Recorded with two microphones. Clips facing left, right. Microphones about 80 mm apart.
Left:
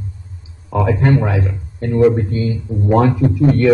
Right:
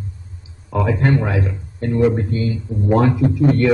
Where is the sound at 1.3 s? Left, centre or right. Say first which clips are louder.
Left 1 dB; left.